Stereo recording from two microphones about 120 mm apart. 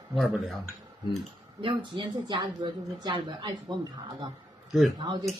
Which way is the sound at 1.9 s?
40° right (ahead or behind).